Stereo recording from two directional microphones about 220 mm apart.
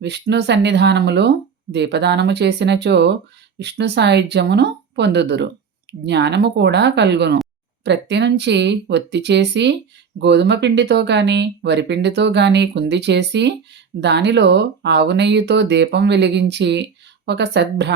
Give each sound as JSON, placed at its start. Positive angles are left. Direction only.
{"t": 0.0, "sound": "speech", "side_deg": -50}